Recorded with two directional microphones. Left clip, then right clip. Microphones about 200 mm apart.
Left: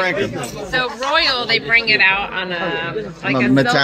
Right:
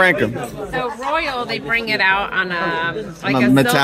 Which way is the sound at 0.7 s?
15° right (ahead or behind).